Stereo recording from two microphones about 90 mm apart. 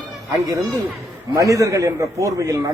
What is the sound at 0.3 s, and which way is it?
A man's voice, 35° right (ahead or behind).